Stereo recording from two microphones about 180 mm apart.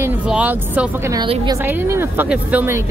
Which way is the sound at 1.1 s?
25° right (ahead or behind).